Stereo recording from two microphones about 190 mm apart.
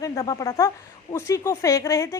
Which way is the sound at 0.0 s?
15° left (ahead or behind).